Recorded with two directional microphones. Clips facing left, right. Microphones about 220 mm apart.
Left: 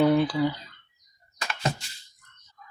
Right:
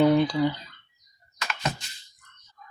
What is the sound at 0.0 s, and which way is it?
Speech, 5° left (ahead or behind).